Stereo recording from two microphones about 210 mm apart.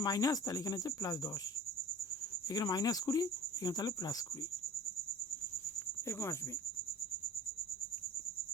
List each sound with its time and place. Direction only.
0.0 s speech: 15° left (ahead or behind)
2.5 s speech: 20° left (ahead or behind)
6.1 s speech: 15° left (ahead or behind)